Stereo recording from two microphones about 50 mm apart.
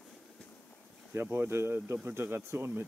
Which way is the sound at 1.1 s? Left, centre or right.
Right.